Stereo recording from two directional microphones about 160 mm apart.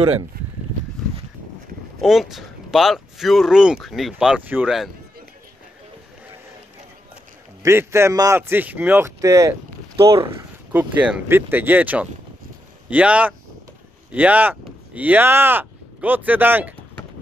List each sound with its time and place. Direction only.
0.0 s speech: 35° right (ahead or behind)
2.0 s speech: centre (ahead or behind)
7.6 s a man's voice: 15° right (ahead or behind)
10.7 s a man's voice: 10° right (ahead or behind)